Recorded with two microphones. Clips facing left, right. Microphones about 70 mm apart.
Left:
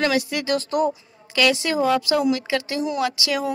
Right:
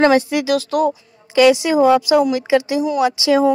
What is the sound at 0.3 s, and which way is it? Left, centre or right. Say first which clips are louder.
A woman's voice: right 5 dB; centre.